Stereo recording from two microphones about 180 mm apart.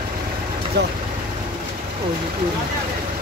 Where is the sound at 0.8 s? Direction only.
70° right (ahead or behind).